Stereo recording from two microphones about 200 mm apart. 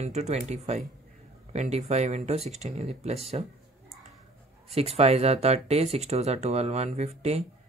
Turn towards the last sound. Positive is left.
turn(degrees=-30)  # may be behind; listen again after turning